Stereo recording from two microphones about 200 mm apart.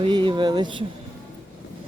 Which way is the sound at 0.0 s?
25° right (ahead or behind).